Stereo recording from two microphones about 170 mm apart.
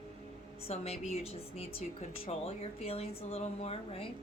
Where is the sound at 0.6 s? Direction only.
35° left (ahead or behind).